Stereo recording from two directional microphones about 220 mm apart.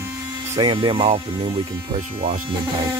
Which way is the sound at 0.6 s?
20° right (ahead or behind).